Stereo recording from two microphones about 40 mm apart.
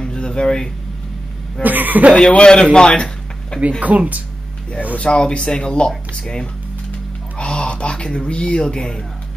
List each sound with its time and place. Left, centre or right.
0.0 s a sound: left
1.6 s speech: right
2.1 s speech: left
2.9 s a sound: left
3.8 s speech: right
4.9 s speech: left
7.3 s speech: left